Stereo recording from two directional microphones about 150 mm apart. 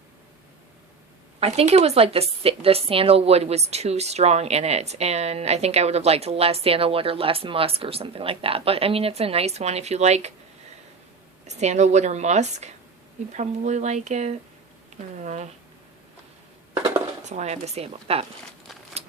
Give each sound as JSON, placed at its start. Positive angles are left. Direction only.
{"t": 1.4, "sound": "a woman's voice", "side_deg": -45}
{"t": 11.4, "sound": "a woman's voice", "side_deg": -50}
{"t": 17.2, "sound": "a woman's voice", "side_deg": -50}
{"t": 19.0, "sound": "crumpling", "side_deg": -45}